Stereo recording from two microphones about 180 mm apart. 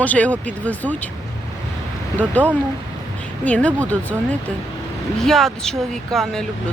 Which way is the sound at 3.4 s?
5° left (ahead or behind).